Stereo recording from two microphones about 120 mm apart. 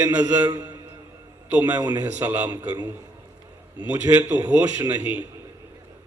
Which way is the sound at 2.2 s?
20° right (ahead or behind).